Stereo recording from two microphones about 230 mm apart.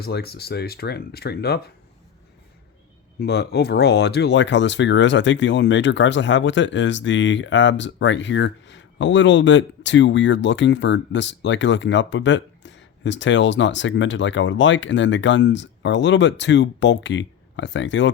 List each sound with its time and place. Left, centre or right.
0.0 s speech: left
3.2 s speech: left